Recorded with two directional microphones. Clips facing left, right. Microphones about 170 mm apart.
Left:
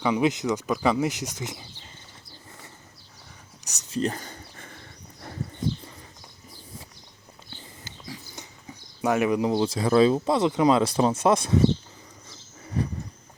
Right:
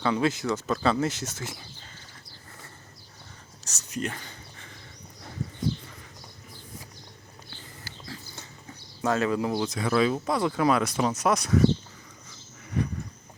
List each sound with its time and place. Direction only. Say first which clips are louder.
0.0 s speech: left 2 dB; 15° left (ahead or behind)
3.6 s whispering: even; 15° left (ahead or behind)
3.8 s a sound: left 5 dB; 30° left (ahead or behind)
7.9 s a sound: left 2 dB; 15° left (ahead or behind)
9.0 s speech: left 3 dB; 15° left (ahead or behind)
9.6 s speech: left 6 dB; 30° left (ahead or behind)
12.6 s vehicle: left 1 dB; 30° left (ahead or behind)